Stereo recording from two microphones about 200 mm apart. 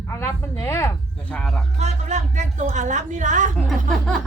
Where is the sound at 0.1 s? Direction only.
10° left (ahead or behind).